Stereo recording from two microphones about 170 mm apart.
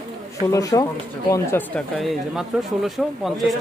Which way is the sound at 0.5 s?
20° left (ahead or behind).